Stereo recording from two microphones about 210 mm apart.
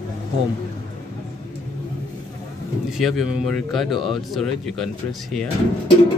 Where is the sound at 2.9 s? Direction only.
Centre (ahead or behind).